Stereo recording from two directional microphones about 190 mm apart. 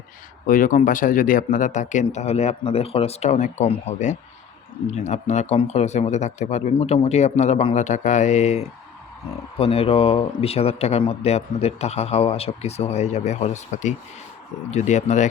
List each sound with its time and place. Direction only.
0.4 s speech: 45° left (ahead or behind)